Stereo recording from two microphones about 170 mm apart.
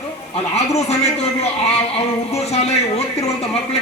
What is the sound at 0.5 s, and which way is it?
Speech, 40° left (ahead or behind).